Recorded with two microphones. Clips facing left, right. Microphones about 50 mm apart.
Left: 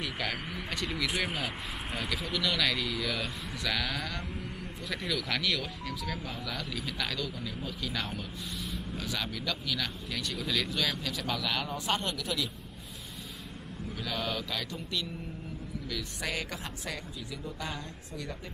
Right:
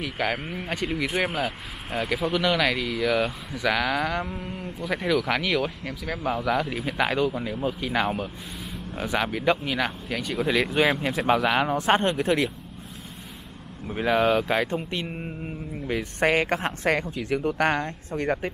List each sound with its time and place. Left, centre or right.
0.2 s speech: centre
1.3 s speech: centre
2.3 s speech: right
13.9 s speech: right